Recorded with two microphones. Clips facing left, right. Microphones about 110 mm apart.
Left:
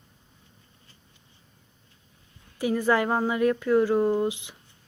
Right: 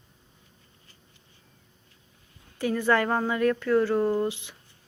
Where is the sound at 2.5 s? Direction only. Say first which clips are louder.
Left 1 dB; 15° left (ahead or behind).